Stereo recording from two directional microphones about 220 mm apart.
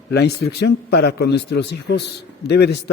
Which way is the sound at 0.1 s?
50° left (ahead or behind).